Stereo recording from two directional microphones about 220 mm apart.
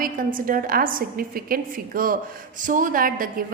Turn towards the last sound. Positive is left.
turn(degrees=-40)  # may be behind; listen again after turning